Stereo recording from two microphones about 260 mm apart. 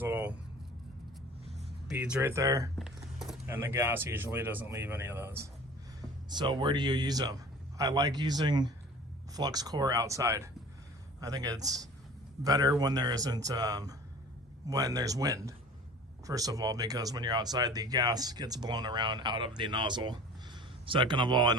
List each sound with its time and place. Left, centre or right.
0.0 s vehicle: centre
1.5 s speech: centre
2.7 s speech: centre